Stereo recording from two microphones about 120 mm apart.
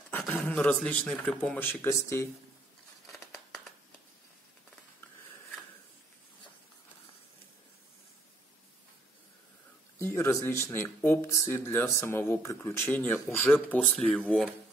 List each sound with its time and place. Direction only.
0.5 s speech: 10° left (ahead or behind)
9.9 s speech: 20° left (ahead or behind)